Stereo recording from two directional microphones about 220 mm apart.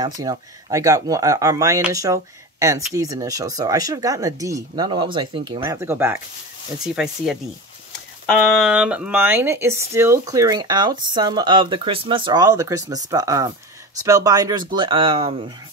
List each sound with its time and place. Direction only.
0.0 s speech: 15° right (ahead or behind)
5.6 s speech: 10° right (ahead or behind)